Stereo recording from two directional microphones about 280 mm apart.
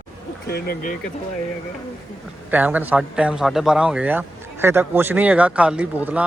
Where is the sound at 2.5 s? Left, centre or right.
Centre.